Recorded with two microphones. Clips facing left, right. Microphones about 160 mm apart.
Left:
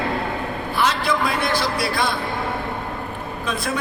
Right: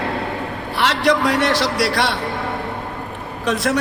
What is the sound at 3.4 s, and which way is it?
Speech, 80° right.